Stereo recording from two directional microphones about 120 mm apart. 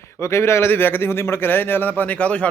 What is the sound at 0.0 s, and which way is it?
A man's voice, 25° left (ahead or behind).